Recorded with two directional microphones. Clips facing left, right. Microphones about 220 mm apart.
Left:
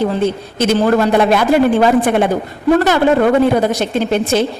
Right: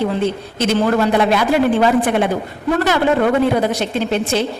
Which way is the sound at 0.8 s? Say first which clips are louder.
Left 3 dB; 50° left (ahead or behind).